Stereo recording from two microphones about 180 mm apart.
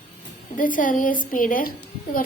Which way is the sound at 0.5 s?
50° left (ahead or behind).